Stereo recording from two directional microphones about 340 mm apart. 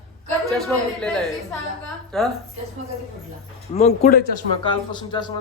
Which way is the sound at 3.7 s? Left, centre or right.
Centre.